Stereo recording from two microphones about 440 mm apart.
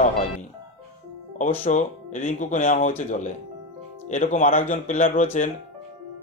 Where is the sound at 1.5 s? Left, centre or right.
Centre.